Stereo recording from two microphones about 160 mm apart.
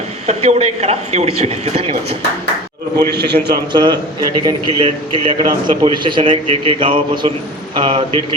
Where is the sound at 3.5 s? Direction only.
30° right (ahead or behind).